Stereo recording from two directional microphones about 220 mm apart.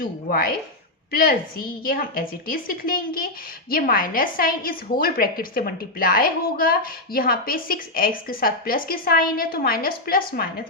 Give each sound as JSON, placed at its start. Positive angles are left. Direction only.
{"t": 0.0, "sound": "a woman's voice", "side_deg": 40}